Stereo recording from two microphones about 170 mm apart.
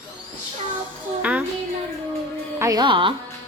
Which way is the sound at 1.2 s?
10° right (ahead or behind).